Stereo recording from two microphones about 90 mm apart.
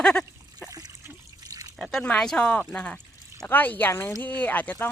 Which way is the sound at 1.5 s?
40° right (ahead or behind).